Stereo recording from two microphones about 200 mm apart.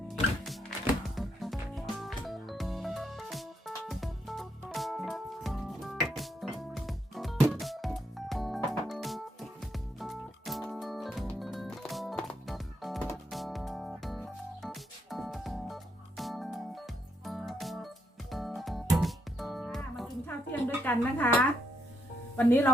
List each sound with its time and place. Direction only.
0.1 s music: centre (ahead or behind)
22.4 s speech: 10° left (ahead or behind)